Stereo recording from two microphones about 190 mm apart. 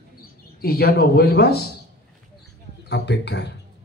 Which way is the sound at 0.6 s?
50° left (ahead or behind).